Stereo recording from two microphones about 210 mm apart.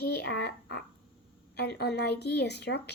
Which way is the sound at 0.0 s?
50° left (ahead or behind).